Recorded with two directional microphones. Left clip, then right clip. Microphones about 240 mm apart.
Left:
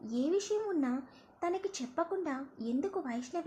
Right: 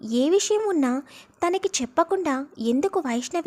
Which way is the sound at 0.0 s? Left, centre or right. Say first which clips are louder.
Right 12 dB; right.